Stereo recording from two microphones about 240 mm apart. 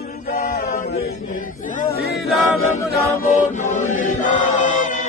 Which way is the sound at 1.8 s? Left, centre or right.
Left.